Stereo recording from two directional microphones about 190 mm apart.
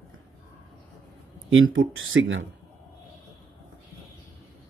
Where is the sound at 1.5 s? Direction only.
90° right.